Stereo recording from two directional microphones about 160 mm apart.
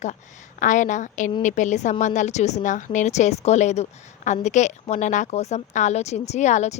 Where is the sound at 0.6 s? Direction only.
50° left (ahead or behind).